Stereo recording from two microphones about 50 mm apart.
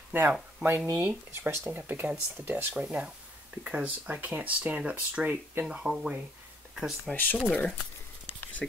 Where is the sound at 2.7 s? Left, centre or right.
Centre.